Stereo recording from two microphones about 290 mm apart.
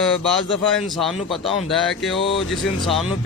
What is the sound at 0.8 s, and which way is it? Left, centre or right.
A man's voice, centre.